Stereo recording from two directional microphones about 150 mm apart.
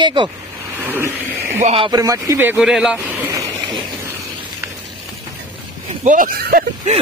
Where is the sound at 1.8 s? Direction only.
25° right (ahead or behind).